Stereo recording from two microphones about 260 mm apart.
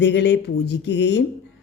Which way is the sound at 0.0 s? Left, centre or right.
Left.